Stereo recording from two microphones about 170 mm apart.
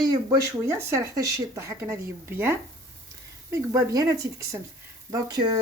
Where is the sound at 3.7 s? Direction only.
20° right (ahead or behind).